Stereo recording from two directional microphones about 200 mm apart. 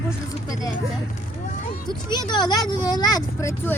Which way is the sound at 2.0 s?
20° left (ahead or behind).